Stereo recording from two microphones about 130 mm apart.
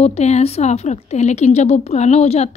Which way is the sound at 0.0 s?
55° left (ahead or behind).